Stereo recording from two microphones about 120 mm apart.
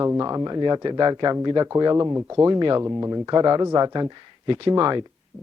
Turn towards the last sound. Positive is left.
turn(degrees=-35)  # may be behind; listen again after turning